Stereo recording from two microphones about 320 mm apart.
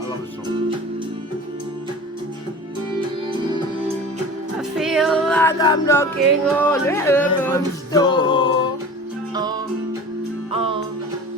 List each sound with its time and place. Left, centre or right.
4.8 s a capella: centre
9.3 s music: centre